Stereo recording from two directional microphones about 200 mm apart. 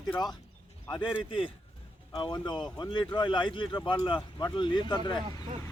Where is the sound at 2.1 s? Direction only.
25° left (ahead or behind).